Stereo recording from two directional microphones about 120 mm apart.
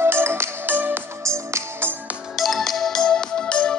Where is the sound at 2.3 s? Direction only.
Centre (ahead or behind).